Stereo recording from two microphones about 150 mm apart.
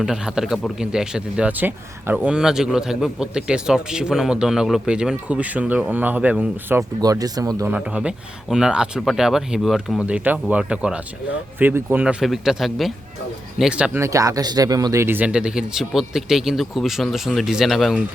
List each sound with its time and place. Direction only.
0.0 s a man's voice: 5° right (ahead or behind)
7.0 s speech: 25° right (ahead or behind)
7.7 s a man's voice: 5° right (ahead or behind)
14.0 s a man's voice: 20° right (ahead or behind); by 18.0 s centre (ahead or behind)